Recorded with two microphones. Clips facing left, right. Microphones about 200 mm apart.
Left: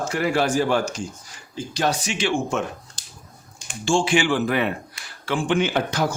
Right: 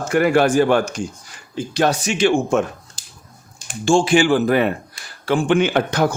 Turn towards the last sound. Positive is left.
turn(degrees=-60)  # may be behind; listen again after turning